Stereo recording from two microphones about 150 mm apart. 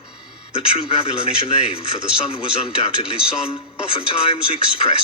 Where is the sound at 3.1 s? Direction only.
5° right (ahead or behind).